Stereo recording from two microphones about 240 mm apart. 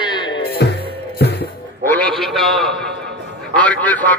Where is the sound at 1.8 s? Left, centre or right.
Centre.